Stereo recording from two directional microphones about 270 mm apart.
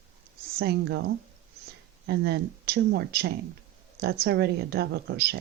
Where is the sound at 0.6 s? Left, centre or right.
Right.